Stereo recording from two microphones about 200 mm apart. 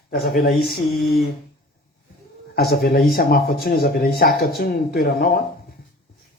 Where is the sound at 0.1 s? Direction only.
50° left (ahead or behind).